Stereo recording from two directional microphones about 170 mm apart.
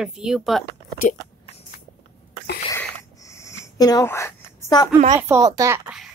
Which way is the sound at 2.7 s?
20° left (ahead or behind).